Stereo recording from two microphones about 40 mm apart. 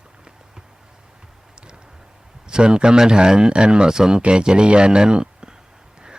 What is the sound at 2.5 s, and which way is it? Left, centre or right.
Speech, right.